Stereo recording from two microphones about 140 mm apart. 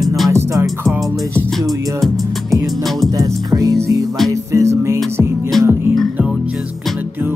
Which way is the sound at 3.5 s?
25° right (ahead or behind).